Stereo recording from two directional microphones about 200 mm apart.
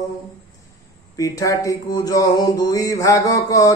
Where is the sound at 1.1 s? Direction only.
15° left (ahead or behind).